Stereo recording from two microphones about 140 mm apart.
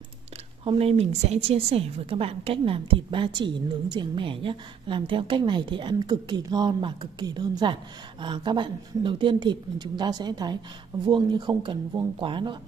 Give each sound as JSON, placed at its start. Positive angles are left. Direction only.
{"t": 0.7, "sound": "a woman's voice", "side_deg": -45}